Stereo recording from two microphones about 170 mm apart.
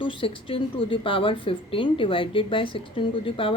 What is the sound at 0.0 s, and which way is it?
Speech, 30° left (ahead or behind).